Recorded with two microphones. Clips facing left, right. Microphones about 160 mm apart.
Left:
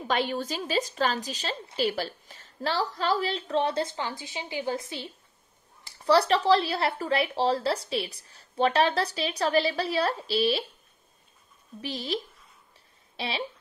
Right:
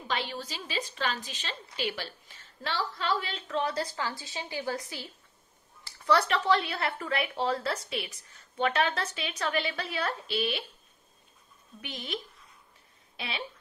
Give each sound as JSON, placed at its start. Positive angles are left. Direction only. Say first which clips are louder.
{"t": 0.1, "sound": "speech", "louder": "left 6 dB", "side_deg": 50}
{"t": 11.8, "sound": "speech", "louder": "left 6 dB", "side_deg": 35}